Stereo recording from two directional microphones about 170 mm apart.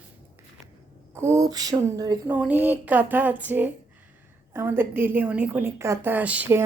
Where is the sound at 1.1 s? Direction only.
15° right (ahead or behind).